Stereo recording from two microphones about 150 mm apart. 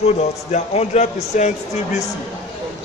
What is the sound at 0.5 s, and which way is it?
A man's voice, 50° left (ahead or behind).